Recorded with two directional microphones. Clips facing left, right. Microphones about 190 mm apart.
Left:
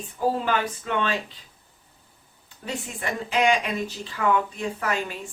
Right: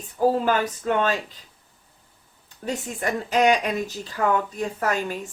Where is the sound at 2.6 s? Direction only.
40° right (ahead or behind).